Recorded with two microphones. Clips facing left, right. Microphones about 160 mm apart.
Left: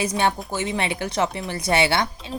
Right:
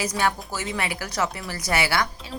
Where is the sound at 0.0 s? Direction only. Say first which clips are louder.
Left 3 dB; 25° left (ahead or behind).